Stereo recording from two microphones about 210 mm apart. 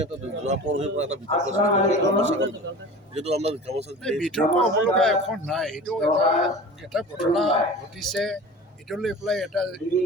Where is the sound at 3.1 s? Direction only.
30° right (ahead or behind).